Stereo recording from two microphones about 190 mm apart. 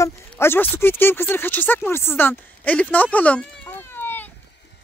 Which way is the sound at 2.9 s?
10° left (ahead or behind).